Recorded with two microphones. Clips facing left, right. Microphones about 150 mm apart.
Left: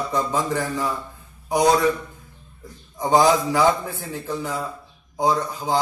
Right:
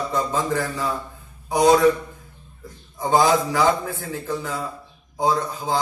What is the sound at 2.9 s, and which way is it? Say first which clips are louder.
Speech: left 1 dB; 15° left (ahead or behind).